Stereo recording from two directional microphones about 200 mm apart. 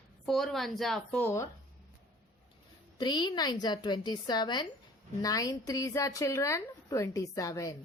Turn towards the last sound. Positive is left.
turn(degrees=15)  # may be behind; listen again after turning